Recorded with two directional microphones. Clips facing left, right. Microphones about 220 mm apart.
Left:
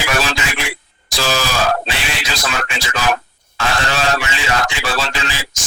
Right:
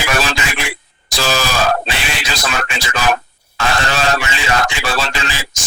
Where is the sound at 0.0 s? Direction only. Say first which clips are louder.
Right 1 dB; 55° right (ahead or behind).